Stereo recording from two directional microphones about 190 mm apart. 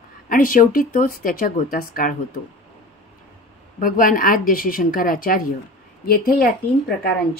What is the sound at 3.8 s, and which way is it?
Speech, 45° left (ahead or behind).